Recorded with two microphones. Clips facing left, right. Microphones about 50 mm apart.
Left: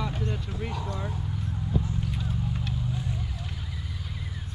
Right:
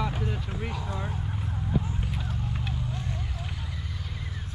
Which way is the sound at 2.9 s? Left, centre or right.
Centre.